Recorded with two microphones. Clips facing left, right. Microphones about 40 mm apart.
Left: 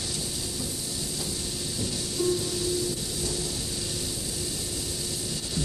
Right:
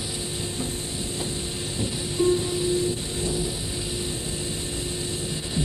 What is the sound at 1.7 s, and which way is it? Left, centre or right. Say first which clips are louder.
Music: right 5 dB; right.